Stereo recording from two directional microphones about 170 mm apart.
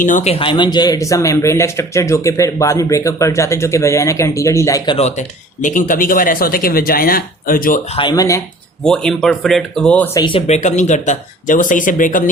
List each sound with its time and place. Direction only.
0.0 s speech: 50° left (ahead or behind)
0.3 s speech: 30° left (ahead or behind)
4.9 s speech: 40° left (ahead or behind)
5.6 s speech: 50° left (ahead or behind)
7.9 s speech: 25° left (ahead or behind)
8.8 s speech: 5° left (ahead or behind)
10.2 s speech: 30° left (ahead or behind); by 12.3 s 50° left (ahead or behind)